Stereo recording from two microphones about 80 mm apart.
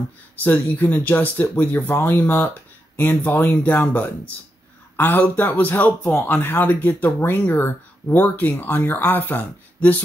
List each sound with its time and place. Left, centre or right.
0.4 s speech: left
4.9 s speech: left